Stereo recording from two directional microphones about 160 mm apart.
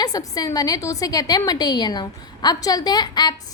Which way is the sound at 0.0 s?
25° left (ahead or behind).